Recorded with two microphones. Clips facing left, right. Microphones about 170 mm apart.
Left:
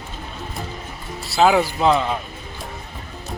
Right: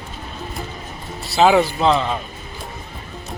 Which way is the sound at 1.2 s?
Centre (ahead or behind).